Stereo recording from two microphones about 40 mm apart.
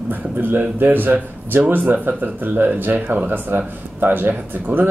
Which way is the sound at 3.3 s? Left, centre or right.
Right.